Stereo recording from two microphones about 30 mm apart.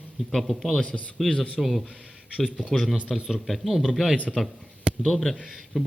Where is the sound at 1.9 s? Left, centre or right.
Right.